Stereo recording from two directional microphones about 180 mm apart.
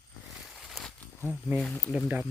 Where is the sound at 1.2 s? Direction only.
10° right (ahead or behind).